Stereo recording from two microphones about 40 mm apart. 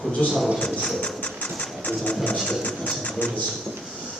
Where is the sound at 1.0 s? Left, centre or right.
Left.